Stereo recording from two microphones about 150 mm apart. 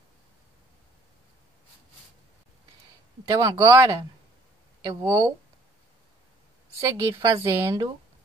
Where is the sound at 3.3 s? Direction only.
20° right (ahead or behind).